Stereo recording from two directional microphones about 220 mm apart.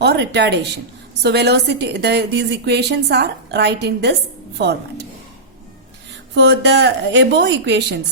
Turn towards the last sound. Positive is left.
turn(degrees=-50)  # may be behind; listen again after turning